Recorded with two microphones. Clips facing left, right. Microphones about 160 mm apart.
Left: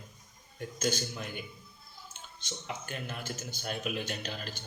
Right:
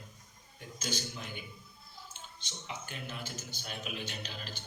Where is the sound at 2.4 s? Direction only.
50° left (ahead or behind).